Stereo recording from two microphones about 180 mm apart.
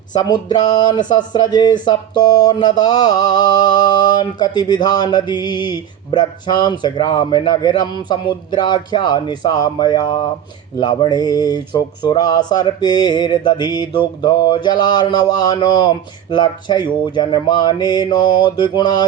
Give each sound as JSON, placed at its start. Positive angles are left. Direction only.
{"t": 0.1, "sound": "speech", "side_deg": 25}